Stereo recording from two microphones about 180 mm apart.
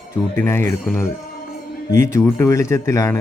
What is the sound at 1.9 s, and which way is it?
Speech, 15° left (ahead or behind).